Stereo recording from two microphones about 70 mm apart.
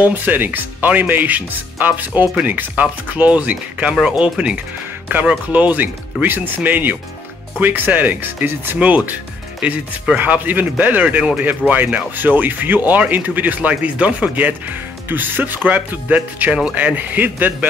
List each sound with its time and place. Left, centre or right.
0.0 s speech: right
5.1 s speech: right
10.1 s speech: right